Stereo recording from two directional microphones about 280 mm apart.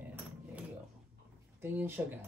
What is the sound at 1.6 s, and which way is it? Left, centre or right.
Speech, centre.